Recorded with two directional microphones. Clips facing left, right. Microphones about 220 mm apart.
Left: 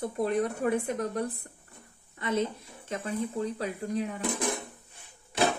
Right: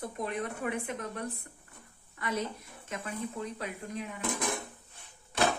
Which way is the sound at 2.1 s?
25° left (ahead or behind).